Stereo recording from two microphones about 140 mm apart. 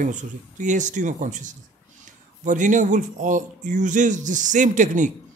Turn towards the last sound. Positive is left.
turn(degrees=-65)  # may be behind; listen again after turning